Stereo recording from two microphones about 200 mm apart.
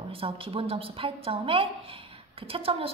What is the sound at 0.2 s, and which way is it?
A woman's voice, 30° right (ahead or behind).